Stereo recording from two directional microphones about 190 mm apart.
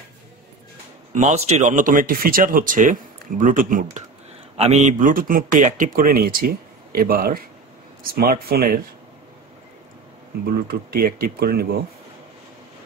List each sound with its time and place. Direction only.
1.1 s speech: 35° right (ahead or behind)
4.6 s speech: 35° right (ahead or behind); by 8.7 s 50° right (ahead or behind)
10.7 s speech: 50° right (ahead or behind)